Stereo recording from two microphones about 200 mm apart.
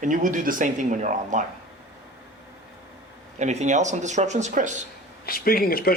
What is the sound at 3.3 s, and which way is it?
Speech, 35° right (ahead or behind).